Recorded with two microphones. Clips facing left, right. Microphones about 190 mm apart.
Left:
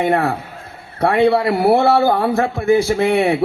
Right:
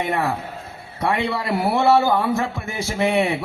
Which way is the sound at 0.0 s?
55° left (ahead or behind).